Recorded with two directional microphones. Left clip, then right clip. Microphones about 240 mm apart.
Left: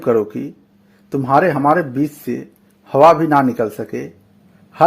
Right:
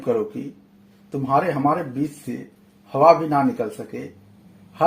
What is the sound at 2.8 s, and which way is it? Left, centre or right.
Speech, left.